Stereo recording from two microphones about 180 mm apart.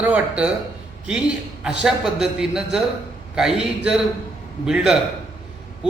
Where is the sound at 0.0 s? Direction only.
5° right (ahead or behind).